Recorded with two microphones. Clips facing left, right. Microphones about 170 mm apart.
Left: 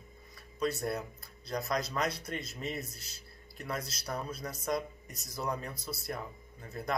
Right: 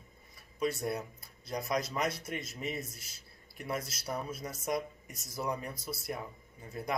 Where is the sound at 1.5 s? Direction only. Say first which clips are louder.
Even; 25° right (ahead or behind).